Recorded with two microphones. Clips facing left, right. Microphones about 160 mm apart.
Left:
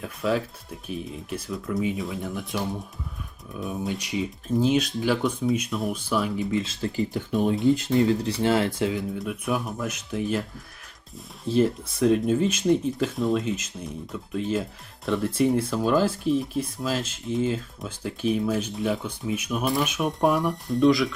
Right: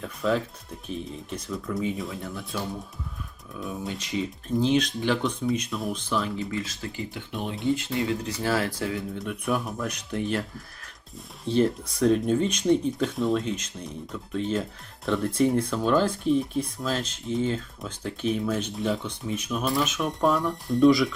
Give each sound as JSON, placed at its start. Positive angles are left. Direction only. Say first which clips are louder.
{"t": 0.0, "sound": "speech", "louder": "even", "side_deg": 5}
{"t": 3.7, "sound": "speech", "louder": "left 3 dB", "side_deg": 15}
{"t": 6.6, "sound": "speech", "louder": "left 6 dB", "side_deg": 30}
{"t": 7.5, "sound": "speech", "louder": "left 3 dB", "side_deg": 0}
{"t": 7.8, "sound": "speech", "louder": "left 6 dB", "side_deg": 35}
{"t": 9.1, "sound": "speech", "louder": "even", "side_deg": 0}
{"t": 11.4, "sound": "speech", "louder": "left 1 dB", "side_deg": 5}
{"t": 20.7, "sound": "speech", "louder": "right 2 dB", "side_deg": 0}